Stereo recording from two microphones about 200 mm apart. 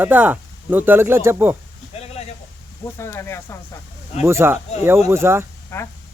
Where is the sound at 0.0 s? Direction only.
10° right (ahead or behind).